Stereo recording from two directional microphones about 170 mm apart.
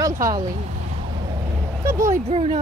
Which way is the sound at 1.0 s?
30° right (ahead or behind).